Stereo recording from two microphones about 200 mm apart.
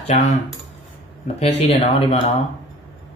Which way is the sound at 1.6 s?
30° left (ahead or behind).